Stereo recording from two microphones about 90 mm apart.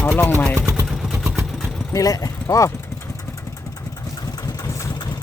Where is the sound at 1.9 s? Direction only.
40° left (ahead or behind).